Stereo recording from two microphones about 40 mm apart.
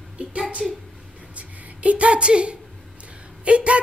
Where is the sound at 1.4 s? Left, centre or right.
Right.